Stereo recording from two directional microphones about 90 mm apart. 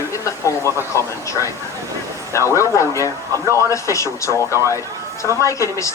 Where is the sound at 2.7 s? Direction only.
35° left (ahead or behind).